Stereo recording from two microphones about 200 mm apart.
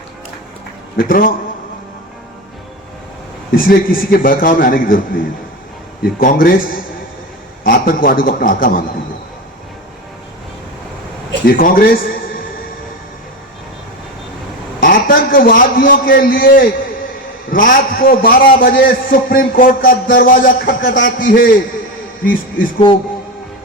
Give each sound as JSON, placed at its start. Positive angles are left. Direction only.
{"t": 0.9, "sound": "a man's voice", "side_deg": 45}
{"t": 3.5, "sound": "a man's voice", "side_deg": 45}
{"t": 11.4, "sound": "a man's voice", "side_deg": 45}
{"t": 14.8, "sound": "a man's voice", "side_deg": 45}
{"t": 22.2, "sound": "music", "side_deg": 45}